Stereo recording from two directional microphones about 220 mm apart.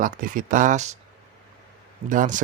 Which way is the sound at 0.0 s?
40° right (ahead or behind).